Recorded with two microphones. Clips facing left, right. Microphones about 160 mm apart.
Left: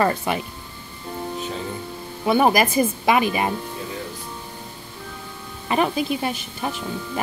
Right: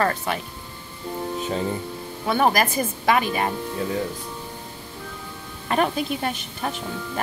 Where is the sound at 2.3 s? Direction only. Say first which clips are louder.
Left 3 dB; 10° left (ahead or behind).